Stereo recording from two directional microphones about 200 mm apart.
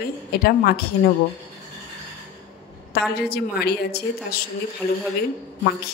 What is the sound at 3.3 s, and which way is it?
Speech, 50° left (ahead or behind).